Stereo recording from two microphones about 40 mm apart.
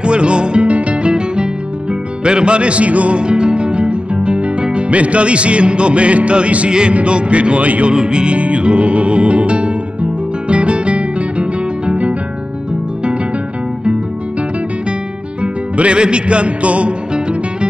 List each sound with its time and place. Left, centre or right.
0.0 s music: right
7.9 s music: right
15.4 s music: right